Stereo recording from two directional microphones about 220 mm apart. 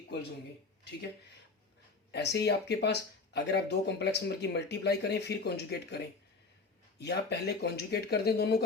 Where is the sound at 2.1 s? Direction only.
50° left (ahead or behind).